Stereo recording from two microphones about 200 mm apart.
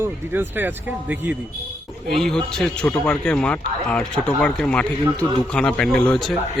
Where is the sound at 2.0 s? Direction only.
Centre (ahead or behind).